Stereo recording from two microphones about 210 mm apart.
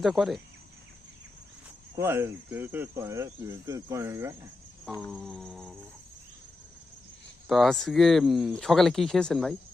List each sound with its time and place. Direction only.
0.0 s speech: centre (ahead or behind)
2.0 s speech: 10° right (ahead or behind)
5.1 s speech: centre (ahead or behind)
7.4 s speech: centre (ahead or behind)